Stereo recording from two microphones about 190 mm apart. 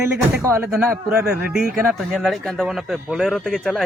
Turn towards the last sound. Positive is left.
turn(degrees=0)  # may be behind; listen again after turning